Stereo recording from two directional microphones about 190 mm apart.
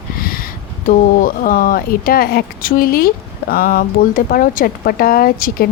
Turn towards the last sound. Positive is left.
turn(degrees=50)  # may be behind; listen again after turning